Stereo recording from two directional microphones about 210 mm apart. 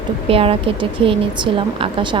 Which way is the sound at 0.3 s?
25° right (ahead or behind).